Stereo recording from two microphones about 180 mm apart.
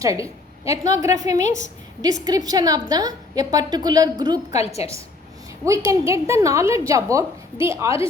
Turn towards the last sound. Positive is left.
turn(degrees=-15)  # may be behind; listen again after turning